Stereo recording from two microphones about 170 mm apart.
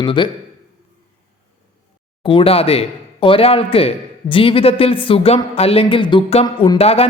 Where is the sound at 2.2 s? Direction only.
30° left (ahead or behind).